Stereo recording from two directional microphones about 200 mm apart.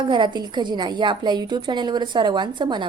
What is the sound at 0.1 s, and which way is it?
A woman's voice, 25° right (ahead or behind).